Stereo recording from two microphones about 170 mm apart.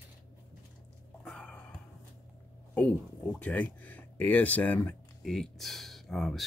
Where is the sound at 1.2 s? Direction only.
5° left (ahead or behind).